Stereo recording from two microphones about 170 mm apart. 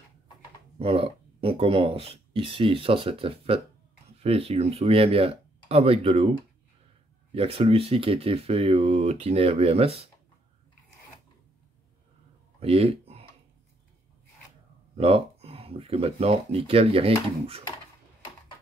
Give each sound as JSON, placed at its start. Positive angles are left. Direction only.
{"t": 0.7, "sound": "speech", "side_deg": -35}
{"t": 7.3, "sound": "speech", "side_deg": -35}
{"t": 12.5, "sound": "a sound", "side_deg": -35}
{"t": 15.0, "sound": "speech", "side_deg": -35}